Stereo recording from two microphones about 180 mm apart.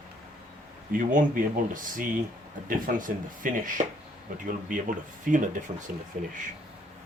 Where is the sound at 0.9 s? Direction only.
50° right (ahead or behind).